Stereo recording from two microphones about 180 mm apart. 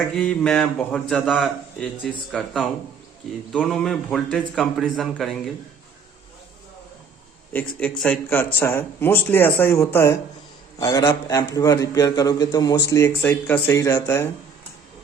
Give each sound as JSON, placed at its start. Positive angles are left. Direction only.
{"t": 0.2, "sound": "a man's voice", "side_deg": 5}
{"t": 7.5, "sound": "a man's voice", "side_deg": 10}